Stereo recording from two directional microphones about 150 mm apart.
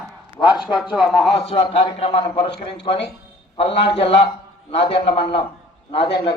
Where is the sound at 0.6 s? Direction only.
Centre (ahead or behind).